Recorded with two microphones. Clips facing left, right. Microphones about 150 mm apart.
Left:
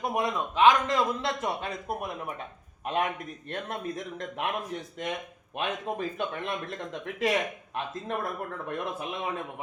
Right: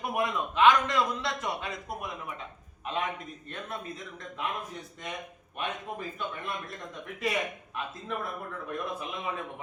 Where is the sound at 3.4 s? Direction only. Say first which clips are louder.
Left 5 dB; 75° left (ahead or behind).